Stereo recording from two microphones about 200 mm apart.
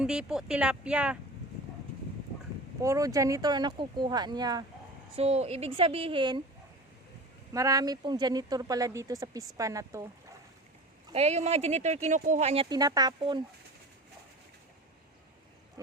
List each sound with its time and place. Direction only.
0.0 s speech: 5° right (ahead or behind)
2.8 s speech: 15° right (ahead or behind)
5.1 s speech: 30° right (ahead or behind)
7.5 s speech: 15° right (ahead or behind)
11.1 s speech: 35° right (ahead or behind)
12.6 s speech: 20° right (ahead or behind)